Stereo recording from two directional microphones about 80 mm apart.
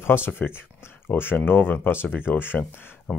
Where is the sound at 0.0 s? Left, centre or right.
Left.